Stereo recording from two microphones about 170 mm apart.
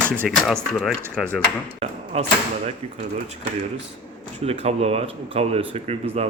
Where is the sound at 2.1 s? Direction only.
40° right (ahead or behind).